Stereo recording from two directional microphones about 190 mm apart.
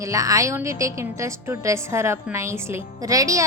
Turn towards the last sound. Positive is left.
turn(degrees=-15)  # may be behind; listen again after turning